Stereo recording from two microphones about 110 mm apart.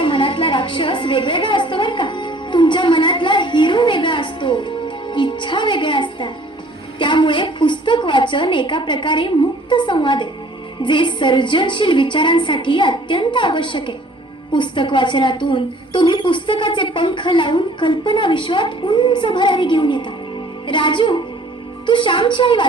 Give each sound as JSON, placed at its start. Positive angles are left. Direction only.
{"t": 0.0, "sound": "music", "side_deg": 50}
{"t": 7.0, "sound": "a sound", "side_deg": 45}
{"t": 10.8, "sound": "a woman's voice", "side_deg": 45}